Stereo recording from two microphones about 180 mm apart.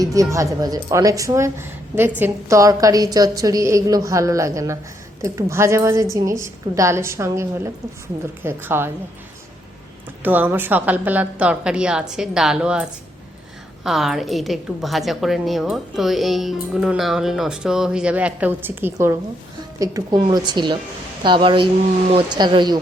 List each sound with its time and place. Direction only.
0.0 s a woman's voice: 20° right (ahead or behind)
10.2 s a woman's voice: 10° right (ahead or behind)